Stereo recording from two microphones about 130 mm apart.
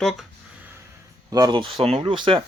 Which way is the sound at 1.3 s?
30° right (ahead or behind).